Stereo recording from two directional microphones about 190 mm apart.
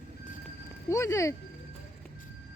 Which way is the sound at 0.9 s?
15° left (ahead or behind).